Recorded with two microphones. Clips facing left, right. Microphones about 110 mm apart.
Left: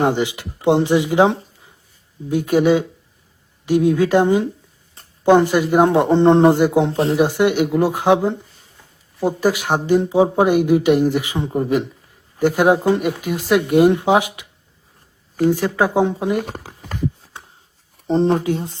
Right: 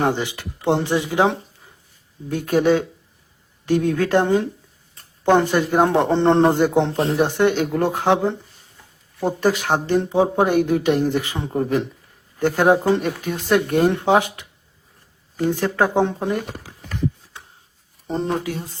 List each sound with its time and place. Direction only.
0.0 s speech: 15° left (ahead or behind)
18.1 s speech: 30° left (ahead or behind)